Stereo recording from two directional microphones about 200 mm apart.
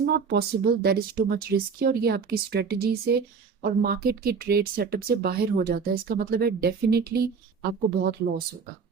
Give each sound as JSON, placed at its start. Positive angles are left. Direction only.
{"t": 0.0, "sound": "a woman's voice", "side_deg": -50}